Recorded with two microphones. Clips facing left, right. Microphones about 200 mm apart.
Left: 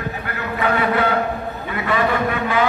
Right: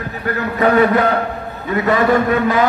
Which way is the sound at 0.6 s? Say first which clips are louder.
Right 6 dB; 40° right (ahead or behind).